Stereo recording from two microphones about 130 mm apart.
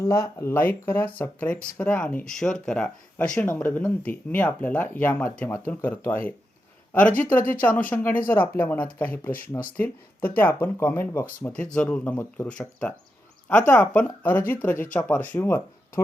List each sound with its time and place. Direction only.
0.0 s speech: 25° left (ahead or behind)
12.5 s speech: 10° left (ahead or behind)